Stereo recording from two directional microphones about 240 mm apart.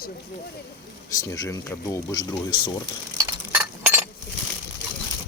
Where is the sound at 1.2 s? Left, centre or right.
Centre.